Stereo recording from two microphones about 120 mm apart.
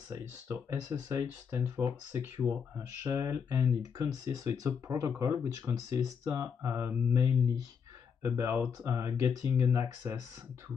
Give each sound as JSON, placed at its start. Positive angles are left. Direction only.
{"t": 0.1, "sound": "speech", "side_deg": -30}
{"t": 1.0, "sound": "speech", "side_deg": -20}